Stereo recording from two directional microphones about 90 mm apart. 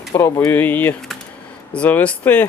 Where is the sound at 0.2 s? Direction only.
30° left (ahead or behind).